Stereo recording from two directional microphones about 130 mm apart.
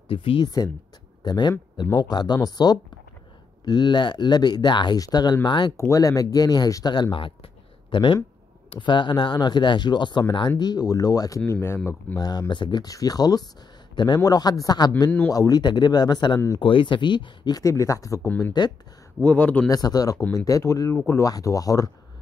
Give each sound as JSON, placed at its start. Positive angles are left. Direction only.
{"t": 0.1, "sound": "speech", "side_deg": 45}
{"t": 1.2, "sound": "speech", "side_deg": 30}
{"t": 12.2, "sound": "speech", "side_deg": 30}
{"t": 19.2, "sound": "speech", "side_deg": 10}
{"t": 19.7, "sound": "speech", "side_deg": 30}